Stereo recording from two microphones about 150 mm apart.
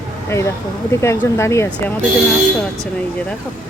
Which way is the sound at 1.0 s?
20° left (ahead or behind).